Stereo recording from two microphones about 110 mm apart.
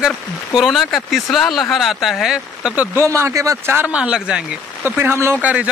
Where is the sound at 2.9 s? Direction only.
25° right (ahead or behind).